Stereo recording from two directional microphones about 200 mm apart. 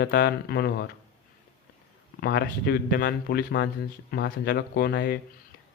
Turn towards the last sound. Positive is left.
turn(degrees=55)  # may be behind; listen again after turning